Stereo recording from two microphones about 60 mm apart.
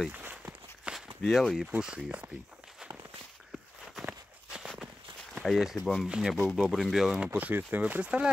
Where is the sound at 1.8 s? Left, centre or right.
Centre.